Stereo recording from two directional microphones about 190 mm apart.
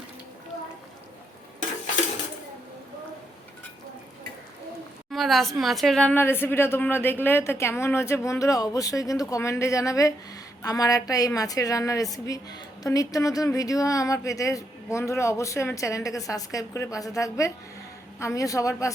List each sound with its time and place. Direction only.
5.1 s a woman's voice: centre (ahead or behind); by 18.9 s 15° left (ahead or behind)